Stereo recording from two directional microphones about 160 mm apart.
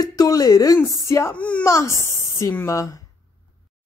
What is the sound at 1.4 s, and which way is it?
Speech, 5° left (ahead or behind).